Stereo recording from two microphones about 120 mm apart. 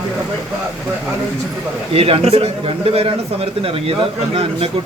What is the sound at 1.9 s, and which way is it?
A man's voice, 55° right (ahead or behind).